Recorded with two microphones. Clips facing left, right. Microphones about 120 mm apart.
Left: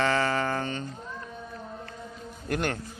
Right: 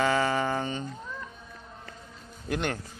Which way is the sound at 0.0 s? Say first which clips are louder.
Even; 10° right (ahead or behind).